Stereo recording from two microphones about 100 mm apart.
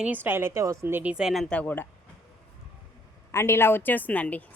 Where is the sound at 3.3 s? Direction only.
25° left (ahead or behind).